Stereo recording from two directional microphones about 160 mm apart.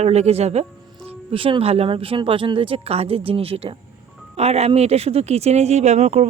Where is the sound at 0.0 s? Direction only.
45° right (ahead or behind).